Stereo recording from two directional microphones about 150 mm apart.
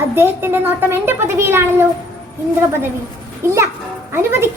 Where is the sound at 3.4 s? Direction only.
15° right (ahead or behind).